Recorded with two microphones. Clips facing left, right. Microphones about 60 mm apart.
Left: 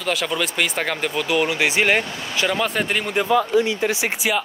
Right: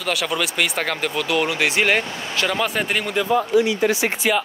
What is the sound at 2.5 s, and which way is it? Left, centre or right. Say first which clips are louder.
Speech: even; centre.